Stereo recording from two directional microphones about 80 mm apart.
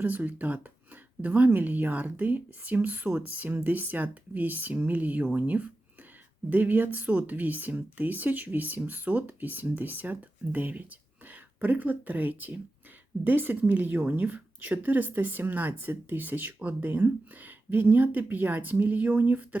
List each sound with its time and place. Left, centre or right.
0.0 s a woman's voice: right